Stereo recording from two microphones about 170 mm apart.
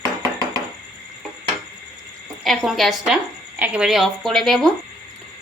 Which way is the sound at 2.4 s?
Centre (ahead or behind).